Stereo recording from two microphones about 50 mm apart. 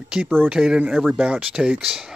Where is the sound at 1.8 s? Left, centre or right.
Centre.